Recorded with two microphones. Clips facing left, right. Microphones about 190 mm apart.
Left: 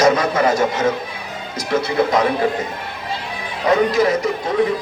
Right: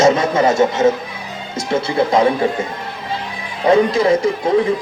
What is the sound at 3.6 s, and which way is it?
Speech, 30° right (ahead or behind).